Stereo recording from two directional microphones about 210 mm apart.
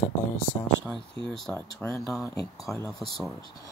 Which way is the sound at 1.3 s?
5° left (ahead or behind).